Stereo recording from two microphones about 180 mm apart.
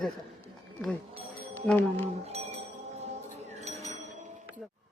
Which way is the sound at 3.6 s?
35° right (ahead or behind).